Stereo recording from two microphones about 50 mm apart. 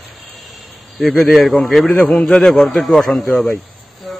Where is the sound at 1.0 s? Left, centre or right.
Centre.